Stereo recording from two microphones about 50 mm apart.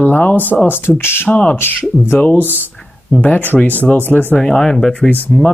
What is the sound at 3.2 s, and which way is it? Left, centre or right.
Speech, left.